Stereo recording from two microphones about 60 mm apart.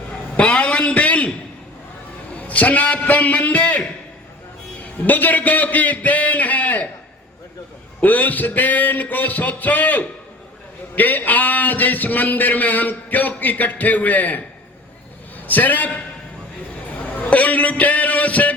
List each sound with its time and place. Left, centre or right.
0.3 s a sound: centre
2.5 s a man's voice: left
5.0 s a man's voice: left
8.0 s a man's voice: left
15.4 s a man's voice: left
17.0 s a man's voice: left